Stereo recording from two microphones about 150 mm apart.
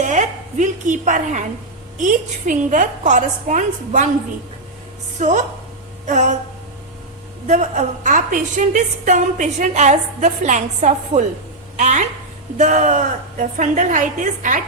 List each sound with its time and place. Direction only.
0.0 s a woman's voice: 55° right (ahead or behind)
5.2 s a woman's voice: 55° right (ahead or behind)
7.4 s a woman's voice: 50° right (ahead or behind)